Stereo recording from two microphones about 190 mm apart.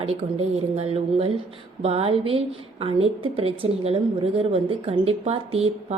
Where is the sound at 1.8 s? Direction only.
30° right (ahead or behind).